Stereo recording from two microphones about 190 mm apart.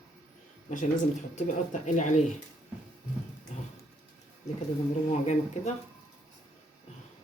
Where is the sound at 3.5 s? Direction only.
40° left (ahead or behind).